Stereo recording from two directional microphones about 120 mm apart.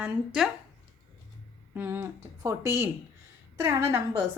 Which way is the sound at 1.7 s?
20° right (ahead or behind).